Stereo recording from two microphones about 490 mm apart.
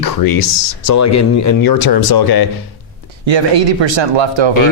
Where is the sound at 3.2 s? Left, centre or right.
Right.